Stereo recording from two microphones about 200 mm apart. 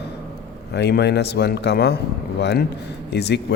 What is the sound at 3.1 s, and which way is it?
Speech, 55° left (ahead or behind).